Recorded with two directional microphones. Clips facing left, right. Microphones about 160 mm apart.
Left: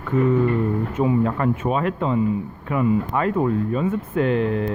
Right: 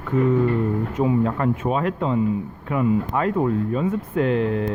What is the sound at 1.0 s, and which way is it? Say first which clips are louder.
Speech: even; 5° right (ahead or behind).